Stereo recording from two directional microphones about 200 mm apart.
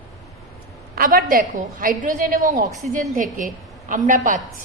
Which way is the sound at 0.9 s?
45° right (ahead or behind).